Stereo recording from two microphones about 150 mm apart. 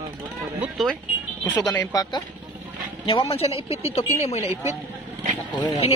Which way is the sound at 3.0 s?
40° left (ahead or behind).